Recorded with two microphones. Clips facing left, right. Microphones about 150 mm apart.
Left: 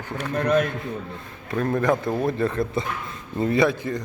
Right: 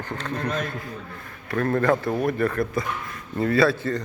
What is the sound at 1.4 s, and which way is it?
Speech, 15° left (ahead or behind).